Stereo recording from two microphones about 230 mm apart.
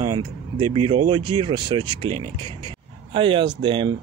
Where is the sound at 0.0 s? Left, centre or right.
Centre.